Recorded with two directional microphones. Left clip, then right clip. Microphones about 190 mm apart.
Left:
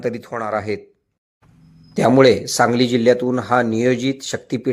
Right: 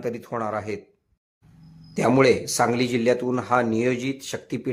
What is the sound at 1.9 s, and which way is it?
Speech, 15° left (ahead or behind).